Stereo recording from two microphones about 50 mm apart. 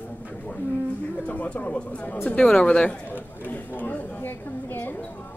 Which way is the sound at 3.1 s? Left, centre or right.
Left.